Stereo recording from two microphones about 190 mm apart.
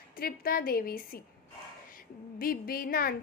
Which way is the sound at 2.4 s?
50° left (ahead or behind).